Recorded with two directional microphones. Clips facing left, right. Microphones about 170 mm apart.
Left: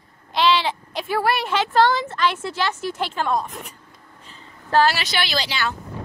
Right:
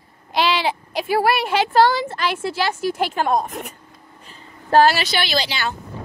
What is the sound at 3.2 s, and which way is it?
Speech, 45° right (ahead or behind).